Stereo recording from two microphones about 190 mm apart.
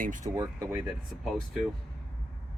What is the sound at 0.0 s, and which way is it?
Speech, 40° right (ahead or behind).